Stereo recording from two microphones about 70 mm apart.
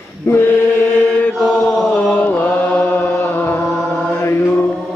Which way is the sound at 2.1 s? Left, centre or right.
Left.